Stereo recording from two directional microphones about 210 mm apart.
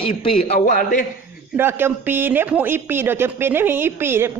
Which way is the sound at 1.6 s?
10° right (ahead or behind).